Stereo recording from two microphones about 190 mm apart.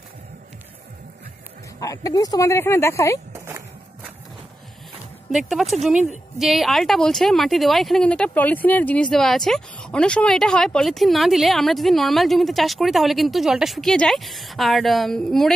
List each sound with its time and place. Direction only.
1.8 s speech: 20° left (ahead or behind)
3.3 s music: 15° right (ahead or behind)
5.3 s speech: centre (ahead or behind)